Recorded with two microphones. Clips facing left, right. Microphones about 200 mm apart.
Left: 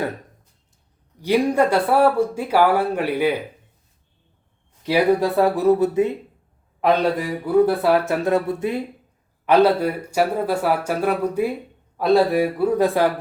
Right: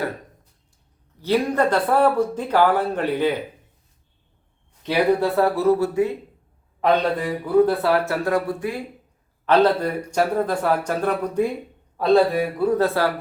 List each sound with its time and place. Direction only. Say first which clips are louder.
1.2 s speech: left 2 dB; 10° left (ahead or behind)
4.9 s speech: left 1 dB; 15° left (ahead or behind)
9.5 s speech: left 2 dB; 10° left (ahead or behind)